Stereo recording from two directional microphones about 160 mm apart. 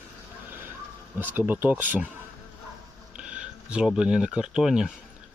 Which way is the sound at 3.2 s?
5° right (ahead or behind).